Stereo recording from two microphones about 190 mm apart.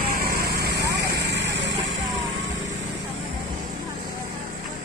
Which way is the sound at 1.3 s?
70° right (ahead or behind).